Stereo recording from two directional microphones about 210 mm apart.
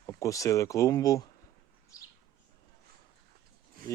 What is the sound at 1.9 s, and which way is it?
Bird, 15° left (ahead or behind).